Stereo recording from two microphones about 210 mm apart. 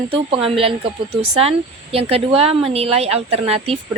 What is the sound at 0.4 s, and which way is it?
Speech, 25° right (ahead or behind).